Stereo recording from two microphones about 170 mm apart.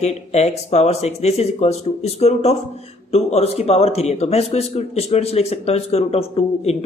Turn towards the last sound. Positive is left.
turn(degrees=35)  # may be behind; listen again after turning